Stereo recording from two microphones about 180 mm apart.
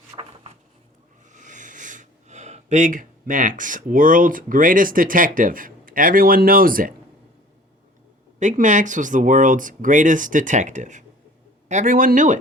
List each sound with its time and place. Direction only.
0.1 s a sound: 20° right (ahead or behind)
1.3 s speech: 45° right (ahead or behind)
8.4 s speech: 45° right (ahead or behind)